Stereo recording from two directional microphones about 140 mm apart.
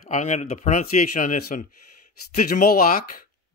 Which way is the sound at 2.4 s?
90° left.